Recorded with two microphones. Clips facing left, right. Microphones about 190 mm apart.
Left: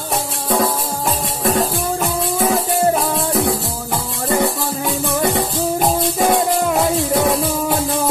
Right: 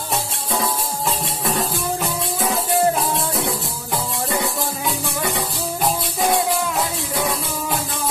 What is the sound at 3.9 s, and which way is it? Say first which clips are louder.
Music: left 3 dB; 60° left (ahead or behind).